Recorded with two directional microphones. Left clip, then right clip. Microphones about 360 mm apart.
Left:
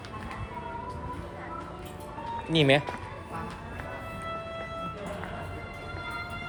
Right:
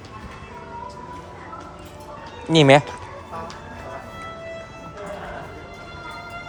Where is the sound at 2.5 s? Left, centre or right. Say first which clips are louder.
Right 10 dB; centre.